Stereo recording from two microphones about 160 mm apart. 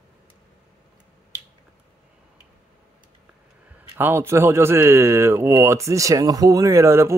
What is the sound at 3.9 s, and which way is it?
Speech, 15° right (ahead or behind).